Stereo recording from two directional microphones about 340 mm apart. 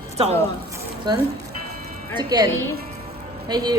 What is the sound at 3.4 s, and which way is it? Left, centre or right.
Speech, centre.